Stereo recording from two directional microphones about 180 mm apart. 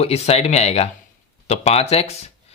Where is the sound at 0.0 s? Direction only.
35° left (ahead or behind).